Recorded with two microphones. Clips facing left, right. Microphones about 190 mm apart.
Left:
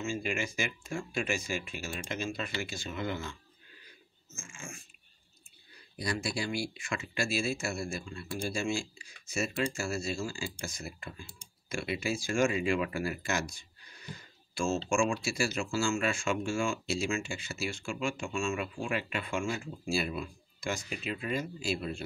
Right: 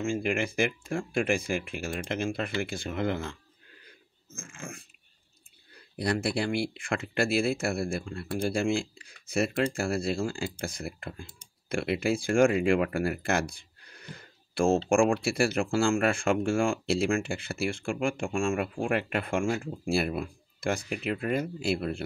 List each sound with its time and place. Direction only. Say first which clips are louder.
0.0 s speech: right 6 dB; 55° right (ahead or behind)
3.8 s a sound: right 3 dB; 55° right (ahead or behind)
5.9 s speech: right 6 dB; 60° right (ahead or behind)